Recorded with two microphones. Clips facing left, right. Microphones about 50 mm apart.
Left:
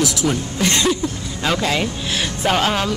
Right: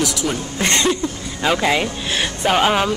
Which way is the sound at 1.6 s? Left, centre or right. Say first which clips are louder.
Right 2 dB; centre.